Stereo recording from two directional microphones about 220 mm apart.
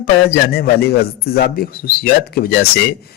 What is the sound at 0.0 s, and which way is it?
Speech, 45° left (ahead or behind).